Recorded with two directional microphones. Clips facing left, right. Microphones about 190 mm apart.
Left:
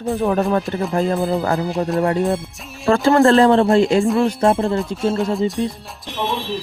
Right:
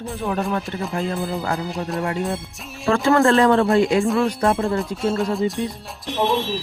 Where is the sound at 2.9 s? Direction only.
30° left (ahead or behind).